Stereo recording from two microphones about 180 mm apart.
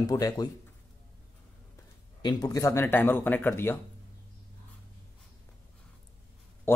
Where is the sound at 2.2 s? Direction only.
20° left (ahead or behind).